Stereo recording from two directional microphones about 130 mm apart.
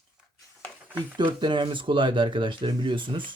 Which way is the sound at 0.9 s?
40° right (ahead or behind).